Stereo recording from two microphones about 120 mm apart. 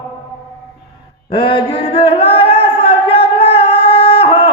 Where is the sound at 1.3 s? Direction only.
45° left (ahead or behind).